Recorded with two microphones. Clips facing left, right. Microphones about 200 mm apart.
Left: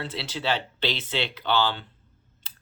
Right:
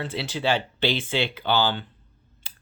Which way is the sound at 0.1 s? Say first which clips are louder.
Right 5 dB; 5° right (ahead or behind).